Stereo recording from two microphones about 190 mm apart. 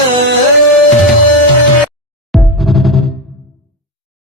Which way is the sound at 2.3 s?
Centre (ahead or behind).